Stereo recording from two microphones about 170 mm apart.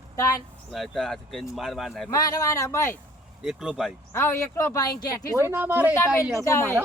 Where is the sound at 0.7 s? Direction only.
Centre (ahead or behind).